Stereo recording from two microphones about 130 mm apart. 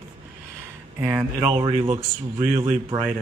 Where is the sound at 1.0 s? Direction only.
15° right (ahead or behind).